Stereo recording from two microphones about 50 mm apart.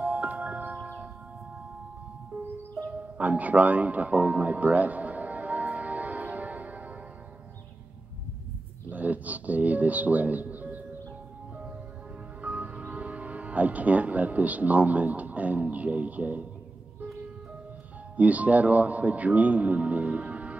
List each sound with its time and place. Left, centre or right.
0.0 s music: right
2.3 s music: right
8.9 s music: right
12.4 s speech: right
18.1 s speech: right